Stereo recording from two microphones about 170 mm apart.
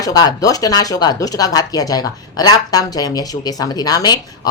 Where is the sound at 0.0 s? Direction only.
20° left (ahead or behind).